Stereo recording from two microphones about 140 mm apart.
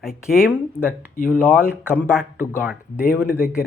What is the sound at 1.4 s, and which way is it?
Speech, 15° left (ahead or behind).